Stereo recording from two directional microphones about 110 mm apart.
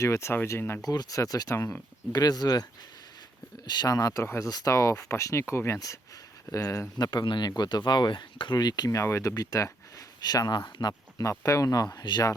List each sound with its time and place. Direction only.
0.0 s speech: 25° left (ahead or behind)
2.1 s speech: 35° left (ahead or behind)
3.7 s speech: 35° left (ahead or behind)
7.0 s speech: 40° left (ahead or behind)
11.2 s speech: 30° left (ahead or behind)